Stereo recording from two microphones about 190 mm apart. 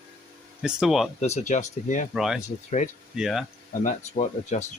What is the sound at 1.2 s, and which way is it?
Speech, 35° left (ahead or behind).